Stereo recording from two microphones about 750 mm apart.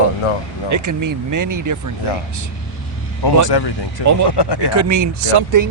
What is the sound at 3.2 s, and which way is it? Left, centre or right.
Speech, left.